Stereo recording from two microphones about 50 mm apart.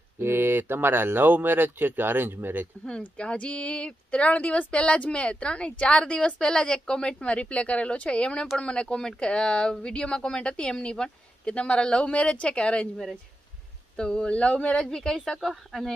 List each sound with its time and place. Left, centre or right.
0.2 s speech: right
3.2 s speech: left
14.9 s a woman's voice: centre
15.5 s speech: centre